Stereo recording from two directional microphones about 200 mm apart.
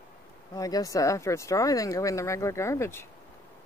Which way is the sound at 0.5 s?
20° left (ahead or behind).